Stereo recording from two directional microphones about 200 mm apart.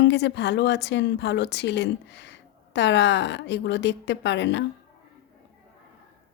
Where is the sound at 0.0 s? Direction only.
60° left (ahead or behind).